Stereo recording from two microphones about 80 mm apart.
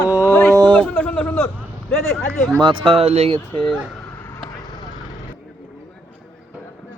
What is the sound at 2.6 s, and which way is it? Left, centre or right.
Speech, right.